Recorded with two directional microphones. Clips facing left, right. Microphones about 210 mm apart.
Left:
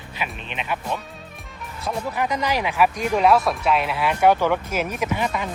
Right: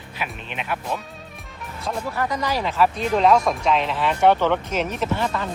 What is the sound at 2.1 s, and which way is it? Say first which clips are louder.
Speech: left 1 dB; 20° left (ahead or behind).